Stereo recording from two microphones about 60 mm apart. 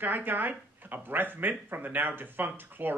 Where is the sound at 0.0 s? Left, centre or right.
Right.